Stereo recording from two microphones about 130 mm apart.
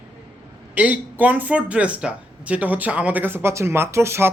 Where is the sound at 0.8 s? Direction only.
10° right (ahead or behind).